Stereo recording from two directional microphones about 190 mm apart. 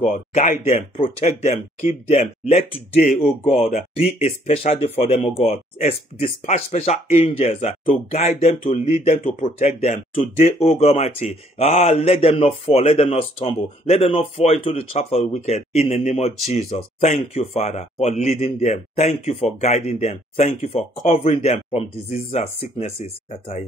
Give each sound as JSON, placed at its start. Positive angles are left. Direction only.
{"t": 0.0, "sound": "speech", "side_deg": 40}
{"t": 3.4, "sound": "speech", "side_deg": 0}
{"t": 3.7, "sound": "speech", "side_deg": 35}